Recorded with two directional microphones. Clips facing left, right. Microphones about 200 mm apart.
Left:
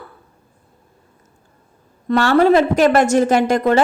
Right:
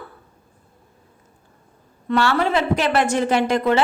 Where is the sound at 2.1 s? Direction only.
40° left (ahead or behind).